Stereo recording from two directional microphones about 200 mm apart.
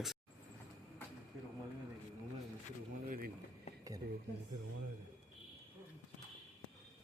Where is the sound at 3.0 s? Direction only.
45° right (ahead or behind).